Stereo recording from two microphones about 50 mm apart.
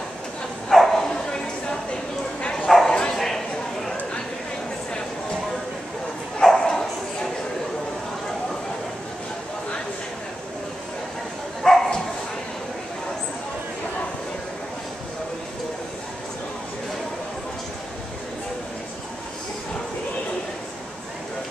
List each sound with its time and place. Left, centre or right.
0.7 s bow-wow: centre
2.9 s bow-wow: centre
3.2 s a sound: centre
6.4 s bow-wow: centre
11.6 s bow-wow: centre